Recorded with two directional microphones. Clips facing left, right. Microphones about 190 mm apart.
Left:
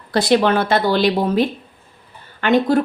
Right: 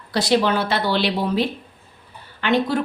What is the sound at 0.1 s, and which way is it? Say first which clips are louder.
A woman's voice: left 4 dB; 55° left (ahead or behind).